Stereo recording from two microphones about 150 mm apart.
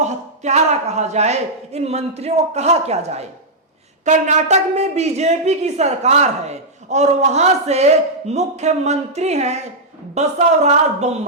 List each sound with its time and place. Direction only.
0.0 s a woman's voice: 50° right (ahead or behind)